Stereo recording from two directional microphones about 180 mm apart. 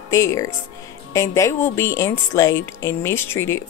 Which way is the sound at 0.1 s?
15° left (ahead or behind).